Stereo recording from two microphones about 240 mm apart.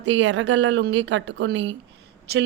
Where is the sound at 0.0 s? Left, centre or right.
Right.